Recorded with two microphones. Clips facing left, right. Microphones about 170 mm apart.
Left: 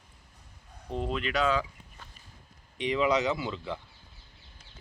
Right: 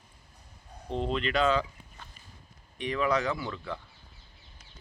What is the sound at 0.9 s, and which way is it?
Speech, 10° left (ahead or behind).